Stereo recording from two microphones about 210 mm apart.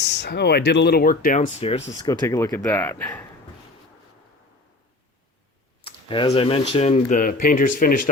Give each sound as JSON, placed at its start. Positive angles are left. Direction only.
{"t": 0.0, "sound": "speech", "side_deg": 55}
{"t": 2.0, "sound": "speech", "side_deg": 15}
{"t": 5.8, "sound": "speech", "side_deg": 25}